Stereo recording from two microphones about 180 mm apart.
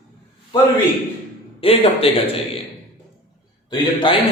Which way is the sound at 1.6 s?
30° left (ahead or behind).